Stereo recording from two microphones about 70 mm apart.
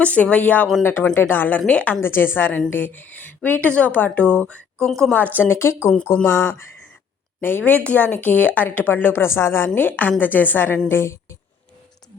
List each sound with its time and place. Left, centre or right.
0.0 s speech: centre
4.9 s speech: centre
5.1 s speech: left
7.6 s speech: left